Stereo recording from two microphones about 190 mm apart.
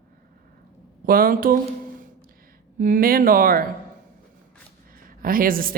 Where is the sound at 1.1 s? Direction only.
50° right (ahead or behind).